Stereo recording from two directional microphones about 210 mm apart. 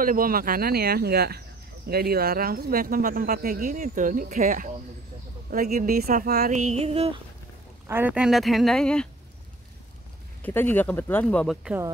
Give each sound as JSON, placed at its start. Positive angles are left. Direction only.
{"t": 0.0, "sound": "speech", "side_deg": -40}
{"t": 6.7, "sound": "a sound", "side_deg": -30}
{"t": 7.9, "sound": "speech", "side_deg": -5}
{"t": 10.4, "sound": "speech", "side_deg": 10}